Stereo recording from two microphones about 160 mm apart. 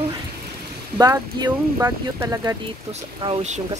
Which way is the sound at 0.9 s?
20° right (ahead or behind).